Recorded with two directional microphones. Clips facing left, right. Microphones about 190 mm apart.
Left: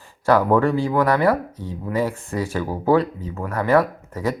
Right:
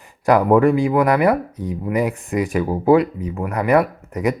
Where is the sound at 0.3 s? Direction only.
15° right (ahead or behind).